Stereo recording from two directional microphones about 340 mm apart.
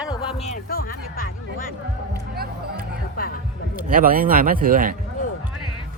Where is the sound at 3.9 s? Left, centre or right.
Right.